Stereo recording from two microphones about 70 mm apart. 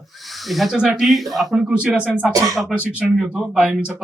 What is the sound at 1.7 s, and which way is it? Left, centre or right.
A man's voice, centre.